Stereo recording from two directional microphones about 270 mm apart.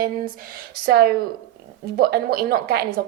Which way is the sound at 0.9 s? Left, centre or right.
Right.